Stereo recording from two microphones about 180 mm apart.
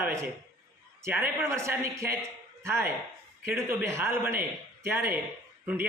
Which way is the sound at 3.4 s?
10° right (ahead or behind).